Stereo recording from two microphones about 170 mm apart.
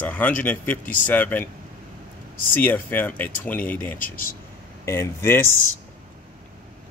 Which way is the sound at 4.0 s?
55° left (ahead or behind).